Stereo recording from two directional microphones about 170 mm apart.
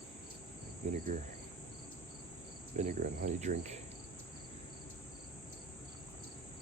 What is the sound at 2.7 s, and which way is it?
Insect, 45° right (ahead or behind).